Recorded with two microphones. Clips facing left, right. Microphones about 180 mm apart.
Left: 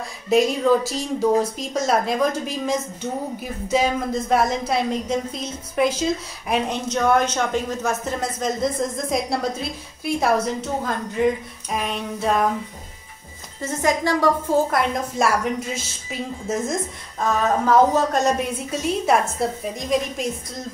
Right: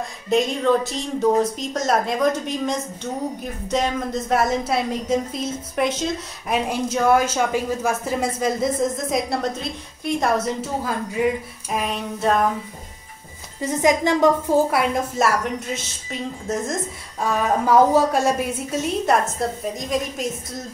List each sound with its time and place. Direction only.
0.3 s a woman's voice: 5° left (ahead or behind)
13.6 s a woman's voice: 15° right (ahead or behind)
14.7 s a woman's voice: 5° right (ahead or behind)
17.2 s a woman's voice: 10° right (ahead or behind)